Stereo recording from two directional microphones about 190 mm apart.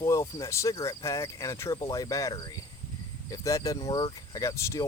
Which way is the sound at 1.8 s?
20° left (ahead or behind).